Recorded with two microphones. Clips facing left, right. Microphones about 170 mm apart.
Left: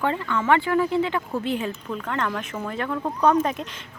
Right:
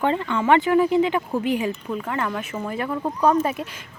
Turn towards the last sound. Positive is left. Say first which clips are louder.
# right 1 dB
turn(degrees=-5)  # may be behind; listen again after turning